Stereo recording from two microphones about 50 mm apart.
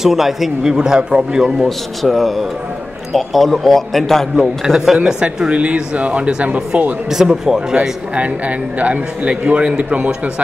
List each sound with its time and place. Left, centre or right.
0.0 s a man's voice: centre
0.7 s speech: centre
1.4 s a man's voice: centre
4.7 s speech: centre
5.2 s speech: right
7.1 s speech: centre
8.1 s speech: right